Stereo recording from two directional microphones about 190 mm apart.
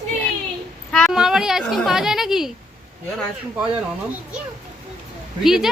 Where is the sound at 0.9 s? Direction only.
Centre (ahead or behind).